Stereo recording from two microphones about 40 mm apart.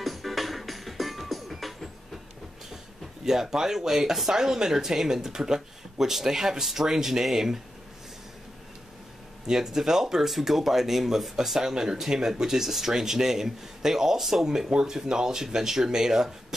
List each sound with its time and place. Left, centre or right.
0.0 s music: centre
3.3 s speech: centre
9.5 s speech: centre